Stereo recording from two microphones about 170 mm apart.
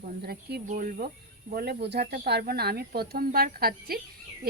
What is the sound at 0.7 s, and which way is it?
Speech, 55° right (ahead or behind).